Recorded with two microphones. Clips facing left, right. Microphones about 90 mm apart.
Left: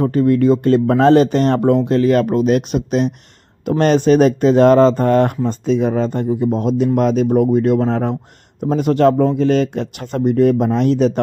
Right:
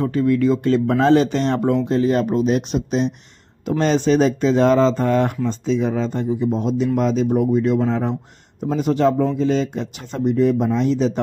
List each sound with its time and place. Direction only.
0.0 s speech: 45° left (ahead or behind); by 11.1 s 60° left (ahead or behind)